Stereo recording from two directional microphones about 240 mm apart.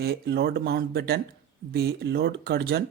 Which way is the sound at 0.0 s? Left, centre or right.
Right.